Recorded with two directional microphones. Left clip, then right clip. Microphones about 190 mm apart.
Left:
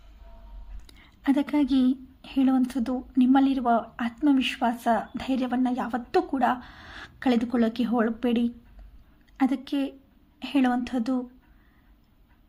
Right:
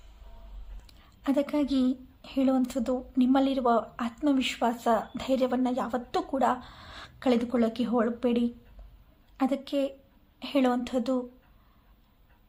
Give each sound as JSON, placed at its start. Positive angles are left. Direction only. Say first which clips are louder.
{"t": 0.9, "sound": "a woman's voice", "louder": "left 4 dB", "side_deg": 15}